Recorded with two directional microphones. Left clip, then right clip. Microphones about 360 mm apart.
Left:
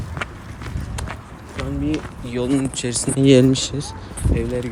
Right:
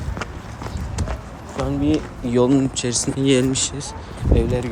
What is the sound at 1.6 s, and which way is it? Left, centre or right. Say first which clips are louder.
Speech: right 4 dB; centre.